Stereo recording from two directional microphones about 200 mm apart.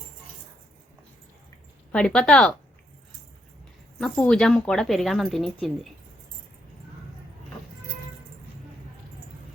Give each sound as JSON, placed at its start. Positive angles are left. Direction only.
{"t": 1.9, "sound": "speech", "side_deg": 5}
{"t": 4.0, "sound": "speech", "side_deg": 5}